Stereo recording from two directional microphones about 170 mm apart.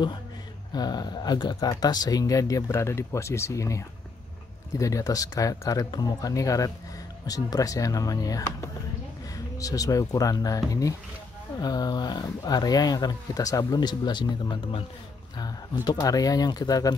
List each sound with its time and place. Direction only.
0.7 s speech: 25° left (ahead or behind)